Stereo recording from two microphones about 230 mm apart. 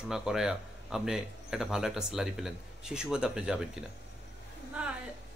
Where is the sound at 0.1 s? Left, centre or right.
Centre.